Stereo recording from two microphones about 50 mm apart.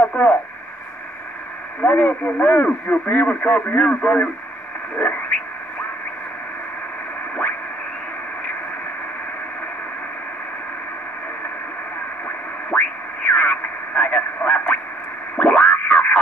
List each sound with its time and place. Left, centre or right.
0.0 s radio: centre
1.8 s speech: left
12.7 s radio: left
15.3 s music: left